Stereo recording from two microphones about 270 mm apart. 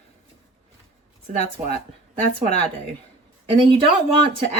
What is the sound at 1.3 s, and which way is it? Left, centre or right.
Speech, right.